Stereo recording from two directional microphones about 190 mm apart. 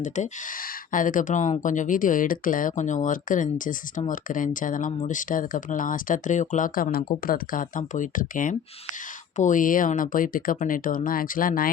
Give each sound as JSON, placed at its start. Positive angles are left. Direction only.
{"t": 0.9, "sound": "speech", "side_deg": 45}